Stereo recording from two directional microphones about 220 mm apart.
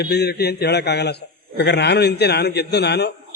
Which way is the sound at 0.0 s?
50° left (ahead or behind).